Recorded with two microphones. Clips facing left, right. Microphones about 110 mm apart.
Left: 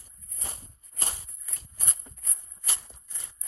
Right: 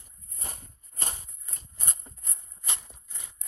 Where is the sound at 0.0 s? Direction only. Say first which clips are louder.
Even; 30° right (ahead or behind).